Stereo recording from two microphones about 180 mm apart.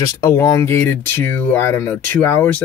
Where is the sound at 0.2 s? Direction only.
15° left (ahead or behind).